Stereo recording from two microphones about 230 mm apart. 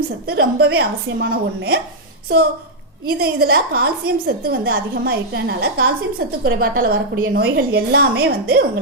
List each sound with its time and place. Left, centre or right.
0.3 s a woman's voice: right
3.1 s a woman's voice: right